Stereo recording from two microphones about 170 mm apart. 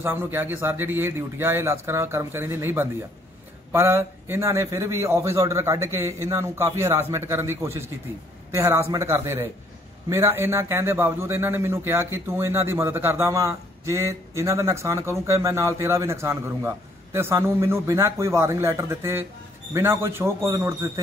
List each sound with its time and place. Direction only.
0.0 s a man's voice: 15° right (ahead or behind)